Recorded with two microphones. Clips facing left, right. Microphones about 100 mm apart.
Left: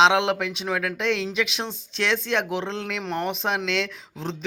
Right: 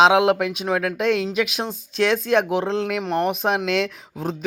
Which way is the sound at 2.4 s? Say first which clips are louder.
Right 6 dB; 15° right (ahead or behind).